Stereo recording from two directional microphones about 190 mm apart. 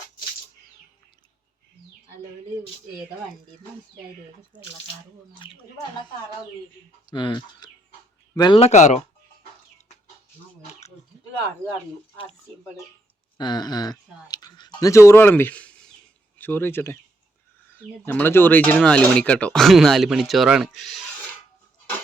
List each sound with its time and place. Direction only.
5.4 s speech: 30° left (ahead or behind)
7.1 s speech: 25° left (ahead or behind)
10.6 s a sound: 35° left (ahead or behind)
13.3 s speech: 20° left (ahead or behind); by 20.9 s 5° right (ahead or behind)